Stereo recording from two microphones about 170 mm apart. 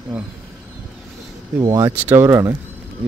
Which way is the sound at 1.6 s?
20° right (ahead or behind).